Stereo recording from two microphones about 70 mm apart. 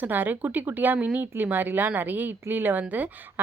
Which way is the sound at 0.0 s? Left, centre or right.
Right.